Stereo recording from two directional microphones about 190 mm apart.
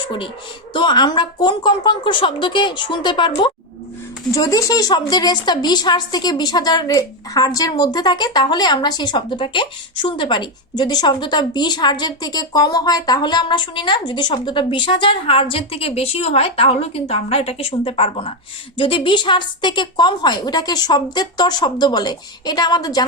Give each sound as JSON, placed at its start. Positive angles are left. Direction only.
{"t": 0.7, "sound": "a woman's voice", "side_deg": 25}